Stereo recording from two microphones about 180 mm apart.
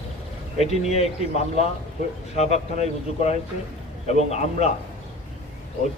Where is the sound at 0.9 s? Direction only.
35° left (ahead or behind).